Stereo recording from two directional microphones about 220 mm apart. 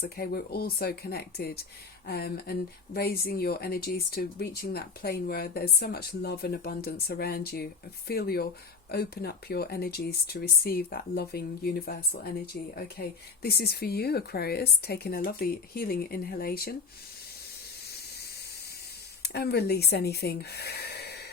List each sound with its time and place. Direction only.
0.0 s speech: 45° left (ahead or behind)
19.2 s speech: 45° left (ahead or behind)